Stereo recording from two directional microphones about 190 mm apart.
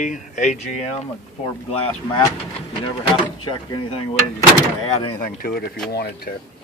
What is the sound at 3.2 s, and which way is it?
Speech, 25° left (ahead or behind).